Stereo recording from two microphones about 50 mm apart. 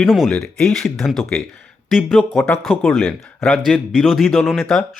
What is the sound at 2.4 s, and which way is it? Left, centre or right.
Speech, centre.